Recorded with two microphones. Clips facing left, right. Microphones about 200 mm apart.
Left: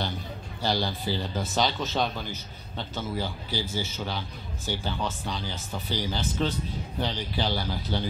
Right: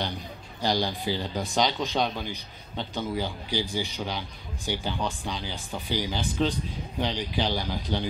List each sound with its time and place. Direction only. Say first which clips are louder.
0.0 s a man's voice: even; 15° right (ahead or behind)